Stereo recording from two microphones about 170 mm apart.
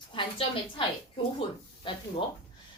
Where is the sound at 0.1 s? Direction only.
30° left (ahead or behind).